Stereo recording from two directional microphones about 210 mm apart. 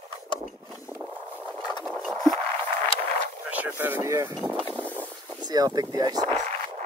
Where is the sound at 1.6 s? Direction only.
20° left (ahead or behind).